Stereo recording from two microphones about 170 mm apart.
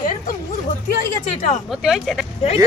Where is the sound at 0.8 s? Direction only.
50° left (ahead or behind).